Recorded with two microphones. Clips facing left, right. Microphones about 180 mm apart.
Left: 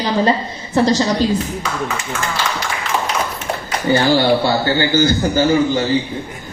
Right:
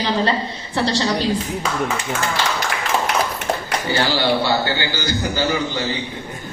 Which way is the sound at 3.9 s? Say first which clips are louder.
Left 6 dB; 50° left (ahead or behind).